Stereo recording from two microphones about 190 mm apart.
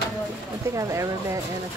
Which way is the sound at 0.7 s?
15° right (ahead or behind).